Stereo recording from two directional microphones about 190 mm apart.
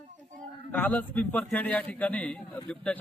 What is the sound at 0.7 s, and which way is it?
A man's voice, 10° left (ahead or behind).